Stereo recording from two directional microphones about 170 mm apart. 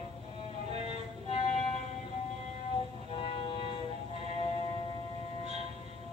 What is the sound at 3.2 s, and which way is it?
Train, 30° left (ahead or behind).